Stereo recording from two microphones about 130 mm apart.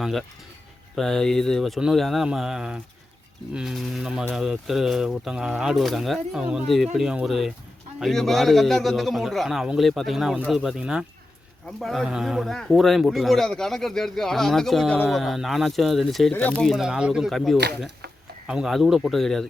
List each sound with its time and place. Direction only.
0.0 s speech: centre (ahead or behind)
16.3 s speech: 10° left (ahead or behind)